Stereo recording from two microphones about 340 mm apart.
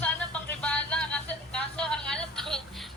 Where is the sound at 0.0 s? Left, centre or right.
Centre.